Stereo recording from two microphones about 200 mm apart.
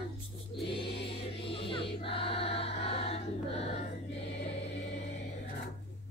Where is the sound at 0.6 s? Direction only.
25° left (ahead or behind).